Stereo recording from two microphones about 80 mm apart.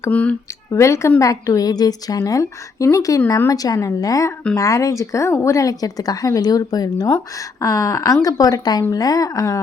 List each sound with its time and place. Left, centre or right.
0.1 s speech: centre
0.7 s a woman's voice: left
7.3 s speech: left